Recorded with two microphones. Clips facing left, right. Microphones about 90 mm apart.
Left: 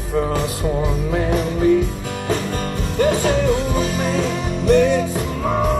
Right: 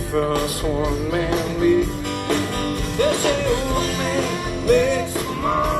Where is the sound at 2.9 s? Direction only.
60° right (ahead or behind).